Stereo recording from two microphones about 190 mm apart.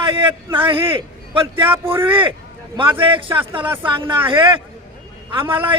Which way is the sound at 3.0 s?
25° right (ahead or behind).